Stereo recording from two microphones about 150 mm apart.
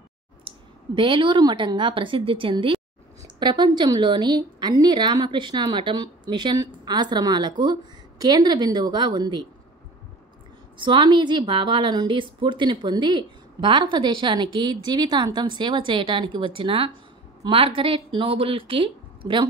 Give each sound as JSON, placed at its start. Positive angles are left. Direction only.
{"t": 0.5, "sound": "a woman's voice", "side_deg": -35}
{"t": 10.8, "sound": "a woman's voice", "side_deg": -30}